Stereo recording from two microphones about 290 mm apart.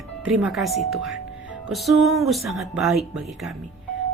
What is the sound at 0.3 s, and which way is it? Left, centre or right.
A woman's voice, centre.